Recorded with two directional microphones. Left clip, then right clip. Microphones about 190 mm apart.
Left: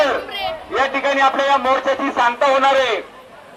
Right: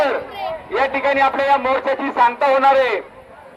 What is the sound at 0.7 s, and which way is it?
A man's voice, 35° right (ahead or behind).